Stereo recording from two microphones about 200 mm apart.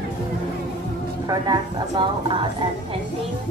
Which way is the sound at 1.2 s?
20° right (ahead or behind).